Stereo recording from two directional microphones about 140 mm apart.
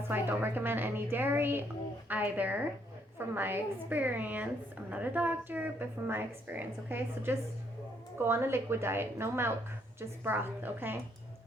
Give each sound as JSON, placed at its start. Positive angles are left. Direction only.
{"t": 0.0, "sound": "a woman's voice", "side_deg": -15}